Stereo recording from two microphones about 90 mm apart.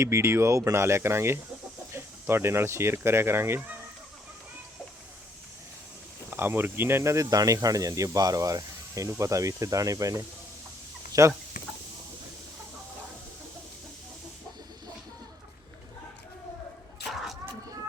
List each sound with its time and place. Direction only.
0.0 s speech: 30° right (ahead or behind)
6.3 s speech: 25° right (ahead or behind); by 11.3 s 40° right (ahead or behind)
17.0 s a sound: centre (ahead or behind)